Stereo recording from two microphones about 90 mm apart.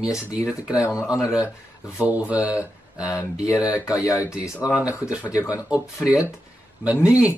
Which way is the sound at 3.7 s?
35° left (ahead or behind).